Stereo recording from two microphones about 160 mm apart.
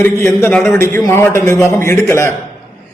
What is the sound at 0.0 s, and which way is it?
A man's voice, 15° left (ahead or behind).